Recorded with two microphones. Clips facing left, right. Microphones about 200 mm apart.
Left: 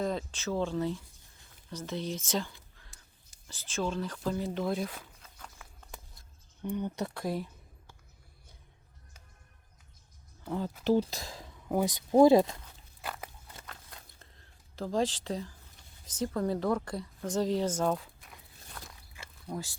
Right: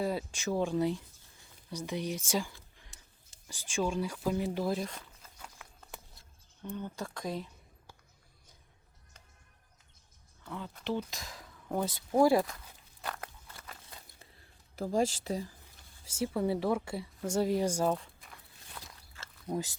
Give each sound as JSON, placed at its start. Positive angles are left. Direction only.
{"t": 0.0, "sound": "speech", "side_deg": -10}
{"t": 3.5, "sound": "speech", "side_deg": -15}
{"t": 4.6, "sound": "speech", "side_deg": 0}
{"t": 5.4, "sound": "a sound", "side_deg": -10}
{"t": 6.6, "sound": "speech", "side_deg": 15}
{"t": 7.1, "sound": "speech", "side_deg": 5}
{"t": 10.4, "sound": "speech", "side_deg": 35}
{"t": 11.7, "sound": "speech", "side_deg": 15}
{"t": 13.0, "sound": "crunch", "side_deg": 5}
{"t": 13.7, "sound": "a sound", "side_deg": -5}
{"t": 16.0, "sound": "speech", "side_deg": -10}
{"t": 17.9, "sound": "a sound", "side_deg": 0}
{"t": 19.5, "sound": "speech", "side_deg": -20}